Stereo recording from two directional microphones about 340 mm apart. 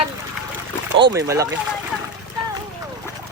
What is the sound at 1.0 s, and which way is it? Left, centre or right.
Speech, centre.